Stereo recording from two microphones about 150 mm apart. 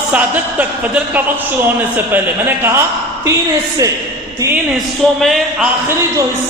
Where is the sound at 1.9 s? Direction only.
15° right (ahead or behind).